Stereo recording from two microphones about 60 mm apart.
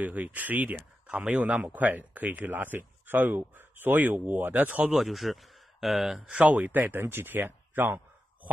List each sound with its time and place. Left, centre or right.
0.0 s speech: right
4.9 s speech: centre
6.4 s speech: right